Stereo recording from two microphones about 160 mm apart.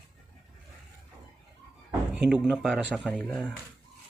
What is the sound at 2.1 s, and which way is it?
Speech, 5° right (ahead or behind).